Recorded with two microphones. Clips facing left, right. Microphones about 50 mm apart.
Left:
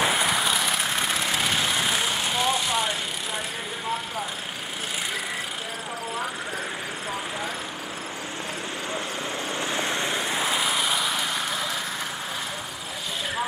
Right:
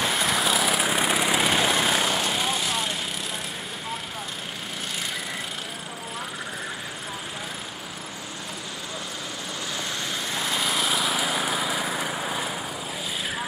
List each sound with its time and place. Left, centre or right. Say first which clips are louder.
0.0 s vehicle: left 1 dB; centre
9.7 s vehicle: left 4 dB; left; by 10.7 s centre
10.7 s vehicle: even; centre